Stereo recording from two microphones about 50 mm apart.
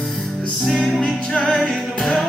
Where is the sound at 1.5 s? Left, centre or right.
Centre.